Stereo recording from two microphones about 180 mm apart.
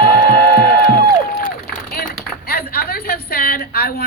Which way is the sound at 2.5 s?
60° left (ahead or behind).